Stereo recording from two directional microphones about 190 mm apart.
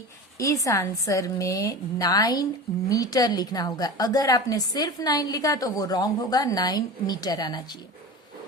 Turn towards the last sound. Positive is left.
turn(degrees=20)  # may be behind; listen again after turning